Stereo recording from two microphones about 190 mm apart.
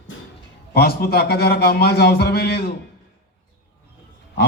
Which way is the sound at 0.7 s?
55° left (ahead or behind).